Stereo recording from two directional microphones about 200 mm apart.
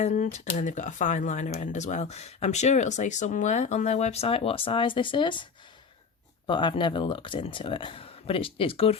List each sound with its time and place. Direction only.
0.0 s speech: 35° left (ahead or behind)
6.5 s speech: 25° left (ahead or behind)